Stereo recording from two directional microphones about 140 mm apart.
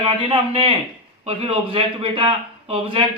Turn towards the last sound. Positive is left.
turn(degrees=-35)  # may be behind; listen again after turning